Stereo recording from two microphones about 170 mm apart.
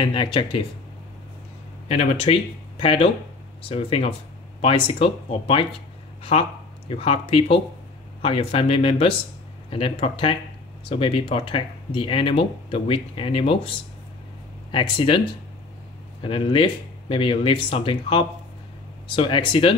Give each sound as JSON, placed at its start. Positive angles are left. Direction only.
{"t": 0.0, "sound": "speech", "side_deg": 30}
{"t": 1.9, "sound": "speech", "side_deg": 40}
{"t": 14.7, "sound": "speech", "side_deg": 30}